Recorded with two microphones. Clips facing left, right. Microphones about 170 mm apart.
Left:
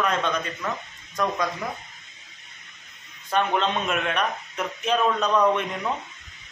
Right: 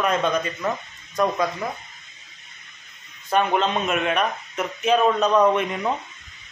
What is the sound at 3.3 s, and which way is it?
A man's voice, 5° right (ahead or behind).